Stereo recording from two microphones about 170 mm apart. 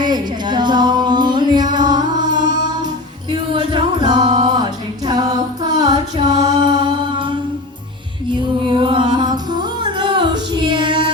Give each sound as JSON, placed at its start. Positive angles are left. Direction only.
{"t": 0.0, "sound": "music", "side_deg": -25}
{"t": 4.4, "sound": "a capella", "side_deg": -25}
{"t": 8.3, "sound": "music", "side_deg": -30}